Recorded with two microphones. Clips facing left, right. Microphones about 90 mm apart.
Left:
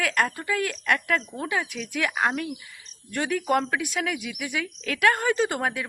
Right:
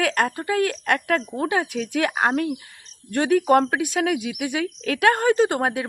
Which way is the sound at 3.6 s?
40° right (ahead or behind).